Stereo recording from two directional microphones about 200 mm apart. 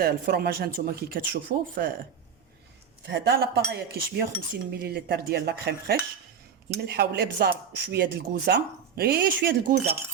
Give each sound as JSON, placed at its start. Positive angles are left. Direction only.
{"t": 0.0, "sound": "speech", "side_deg": -50}
{"t": 3.1, "sound": "speech", "side_deg": -55}